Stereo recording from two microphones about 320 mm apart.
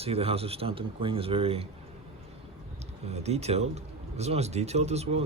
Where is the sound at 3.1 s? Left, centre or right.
Centre.